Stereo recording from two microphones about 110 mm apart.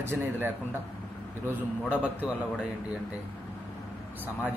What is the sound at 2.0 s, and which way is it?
Speech, 10° right (ahead or behind).